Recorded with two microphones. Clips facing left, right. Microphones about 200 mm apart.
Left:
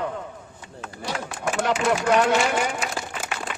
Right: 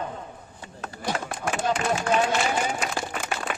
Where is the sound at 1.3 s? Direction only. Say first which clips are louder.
Left 4 dB; 75° left (ahead or behind).